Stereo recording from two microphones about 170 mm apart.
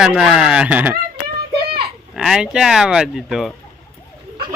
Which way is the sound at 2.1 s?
5° right (ahead or behind).